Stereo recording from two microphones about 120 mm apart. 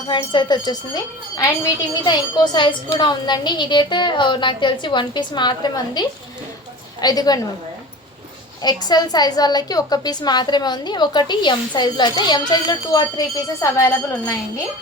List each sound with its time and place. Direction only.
0.1 s a woman's voice: 40° left (ahead or behind)
2.0 s a woman's voice: 35° left (ahead or behind)
8.6 s a woman's voice: 35° left (ahead or behind)